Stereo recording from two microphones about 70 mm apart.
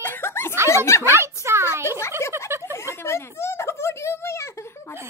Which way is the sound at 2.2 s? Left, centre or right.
Left.